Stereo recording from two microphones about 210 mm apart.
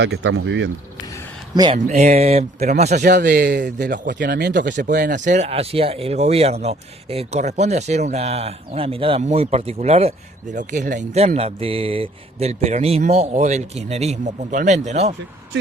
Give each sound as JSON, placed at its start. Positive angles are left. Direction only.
{"t": 0.0, "sound": "speech", "side_deg": -60}
{"t": 1.5, "sound": "speech", "side_deg": -25}